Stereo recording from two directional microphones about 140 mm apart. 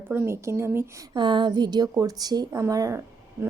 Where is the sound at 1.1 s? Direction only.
35° right (ahead or behind).